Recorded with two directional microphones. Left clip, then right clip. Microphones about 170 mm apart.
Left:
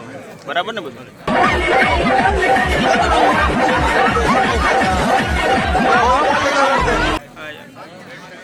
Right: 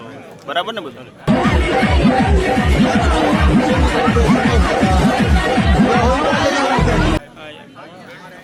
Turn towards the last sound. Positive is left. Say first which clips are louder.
# left 3 dB
turn(degrees=15)  # may be behind; listen again after turning